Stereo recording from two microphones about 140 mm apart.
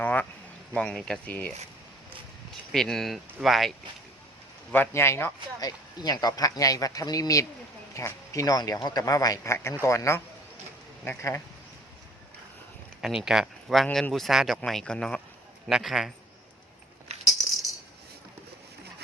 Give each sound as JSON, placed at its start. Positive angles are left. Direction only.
{"t": 0.0, "sound": "a sound", "side_deg": 10}
{"t": 0.7, "sound": "speech", "side_deg": 5}
{"t": 2.7, "sound": "speech", "side_deg": 5}
{"t": 4.7, "sound": "speech", "side_deg": 15}
{"t": 13.0, "sound": "speech", "side_deg": -5}
{"t": 17.1, "sound": "rattle", "side_deg": -50}